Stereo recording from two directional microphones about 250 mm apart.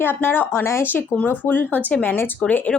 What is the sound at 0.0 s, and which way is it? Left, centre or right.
A woman's voice, centre.